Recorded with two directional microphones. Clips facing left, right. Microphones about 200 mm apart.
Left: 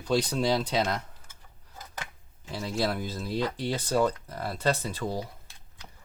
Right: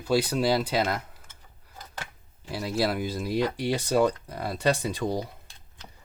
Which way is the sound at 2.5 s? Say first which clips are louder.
Right 2 dB; 10° right (ahead or behind).